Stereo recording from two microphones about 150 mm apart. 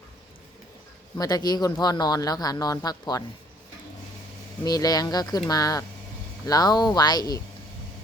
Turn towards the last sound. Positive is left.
turn(degrees=25)  # may be behind; listen again after turning